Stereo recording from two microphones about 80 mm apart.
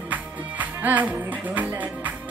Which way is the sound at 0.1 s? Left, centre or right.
Right.